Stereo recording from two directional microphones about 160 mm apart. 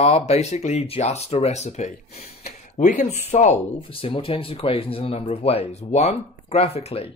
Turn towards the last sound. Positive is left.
turn(degrees=40)  # may be behind; listen again after turning